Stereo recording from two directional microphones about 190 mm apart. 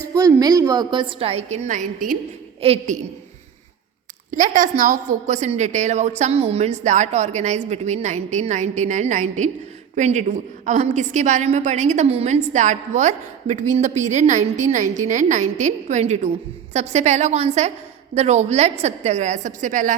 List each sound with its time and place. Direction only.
0.1 s a woman's voice: 20° right (ahead or behind); by 2.1 s 45° right (ahead or behind)
2.6 s a woman's voice: 35° right (ahead or behind)
4.3 s a woman's voice: 45° right (ahead or behind)